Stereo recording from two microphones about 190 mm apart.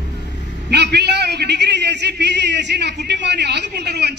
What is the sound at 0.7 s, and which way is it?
A man's voice, 60° right (ahead or behind).